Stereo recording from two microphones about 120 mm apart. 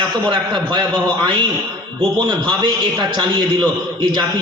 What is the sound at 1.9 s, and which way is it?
A man's voice, 40° right (ahead or behind).